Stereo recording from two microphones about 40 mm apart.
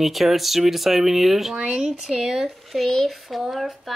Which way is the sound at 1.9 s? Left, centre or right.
Centre.